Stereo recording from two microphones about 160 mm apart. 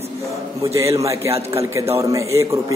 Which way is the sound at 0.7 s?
20° right (ahead or behind).